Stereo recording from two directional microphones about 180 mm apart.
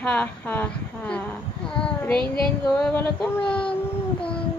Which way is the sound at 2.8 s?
5° left (ahead or behind).